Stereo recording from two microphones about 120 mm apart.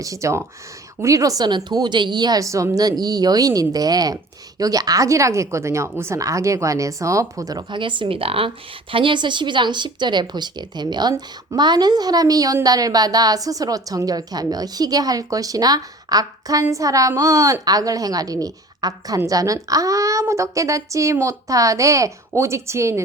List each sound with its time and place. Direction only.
0.0 s a woman's voice: 25° right (ahead or behind)